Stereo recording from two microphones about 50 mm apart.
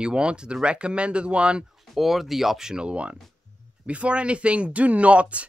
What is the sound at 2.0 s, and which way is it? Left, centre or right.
Speech, centre.